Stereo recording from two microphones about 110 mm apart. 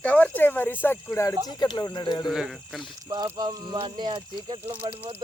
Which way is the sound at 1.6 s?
40° left (ahead or behind).